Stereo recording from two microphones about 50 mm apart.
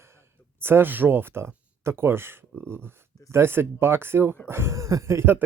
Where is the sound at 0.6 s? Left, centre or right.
Right.